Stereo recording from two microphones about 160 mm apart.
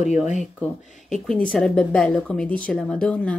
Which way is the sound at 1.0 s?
5° left (ahead or behind).